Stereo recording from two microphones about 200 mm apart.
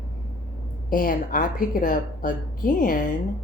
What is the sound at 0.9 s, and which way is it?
Speech, 45° left (ahead or behind).